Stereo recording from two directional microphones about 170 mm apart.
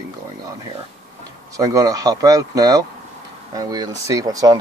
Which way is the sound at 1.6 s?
20° right (ahead or behind).